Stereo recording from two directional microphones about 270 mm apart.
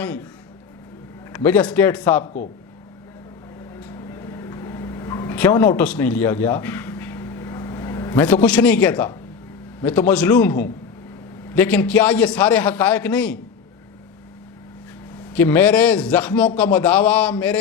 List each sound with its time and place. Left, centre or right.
0.0 s a man's voice: centre
1.3 s a man's voice: centre
2.2 s speech: left
3.8 s a sound: centre
9.8 s a man's voice: centre
15.3 s a man's voice: centre